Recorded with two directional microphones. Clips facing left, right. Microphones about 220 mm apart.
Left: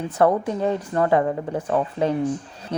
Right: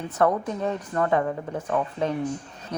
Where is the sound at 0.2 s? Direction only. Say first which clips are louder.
Left 4 dB; 30° left (ahead or behind).